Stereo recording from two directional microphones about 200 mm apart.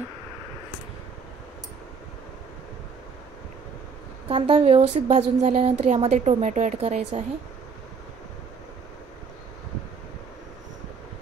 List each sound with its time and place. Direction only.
4.3 s a woman's voice: 30° right (ahead or behind)